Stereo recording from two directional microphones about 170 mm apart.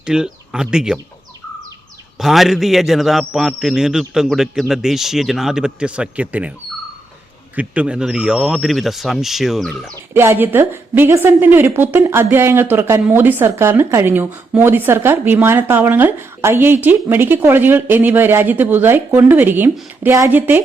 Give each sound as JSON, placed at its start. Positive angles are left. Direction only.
{"t": 0.0, "sound": "speech", "side_deg": -5}
{"t": 2.1, "sound": "a man's voice", "side_deg": 0}
{"t": 7.5, "sound": "a man's voice", "side_deg": -10}
{"t": 10.2, "sound": "a woman's voice", "side_deg": -10}